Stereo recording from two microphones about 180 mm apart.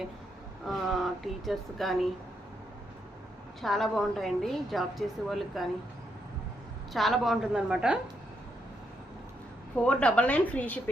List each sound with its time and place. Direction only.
0.7 s a woman's voice: centre (ahead or behind)
3.6 s a woman's voice: centre (ahead or behind)
6.9 s a woman's voice: centre (ahead or behind)
9.7 s a woman's voice: 5° left (ahead or behind)